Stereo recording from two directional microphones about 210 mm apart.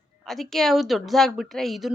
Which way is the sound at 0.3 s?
Centre (ahead or behind).